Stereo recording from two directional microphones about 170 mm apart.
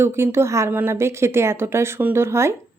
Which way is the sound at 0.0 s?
15° right (ahead or behind).